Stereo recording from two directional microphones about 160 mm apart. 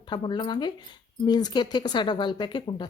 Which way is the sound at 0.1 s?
30° left (ahead or behind).